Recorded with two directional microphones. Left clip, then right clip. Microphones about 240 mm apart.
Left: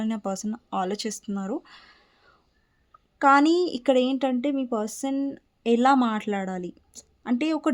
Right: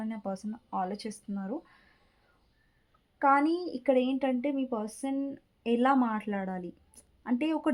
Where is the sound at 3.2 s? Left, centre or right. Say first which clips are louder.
Left 7 dB; left.